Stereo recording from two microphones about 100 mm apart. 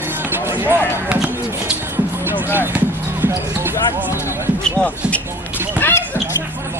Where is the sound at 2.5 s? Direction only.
20° right (ahead or behind).